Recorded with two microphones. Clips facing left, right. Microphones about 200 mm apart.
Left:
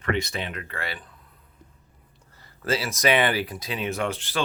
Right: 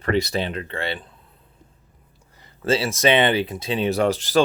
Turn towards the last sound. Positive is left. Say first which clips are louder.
# right 9 dB
turn(degrees=-40)  # may be behind; listen again after turning